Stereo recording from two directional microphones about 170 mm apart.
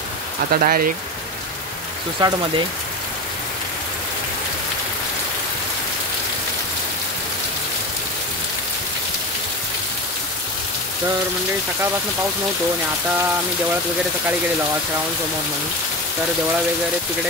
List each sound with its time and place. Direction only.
0.5 s speech: 60° right (ahead or behind)
2.1 s speech: 20° right (ahead or behind)